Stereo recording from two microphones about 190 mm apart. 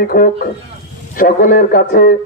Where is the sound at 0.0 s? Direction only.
50° left (ahead or behind).